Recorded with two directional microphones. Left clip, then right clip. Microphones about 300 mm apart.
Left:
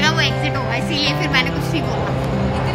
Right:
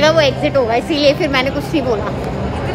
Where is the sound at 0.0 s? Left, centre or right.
Centre.